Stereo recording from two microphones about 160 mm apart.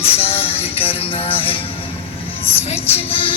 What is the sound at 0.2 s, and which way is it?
Music, 35° left (ahead or behind).